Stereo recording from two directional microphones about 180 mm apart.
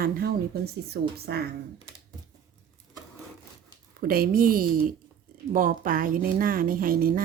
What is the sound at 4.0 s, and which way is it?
Speech, 55° right (ahead or behind).